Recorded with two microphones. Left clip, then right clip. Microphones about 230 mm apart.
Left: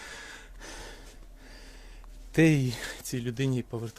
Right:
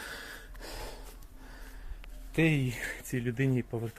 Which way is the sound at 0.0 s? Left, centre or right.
Centre.